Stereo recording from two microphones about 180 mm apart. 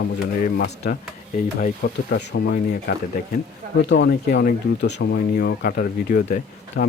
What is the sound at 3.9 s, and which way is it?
Speech, 65° left (ahead or behind).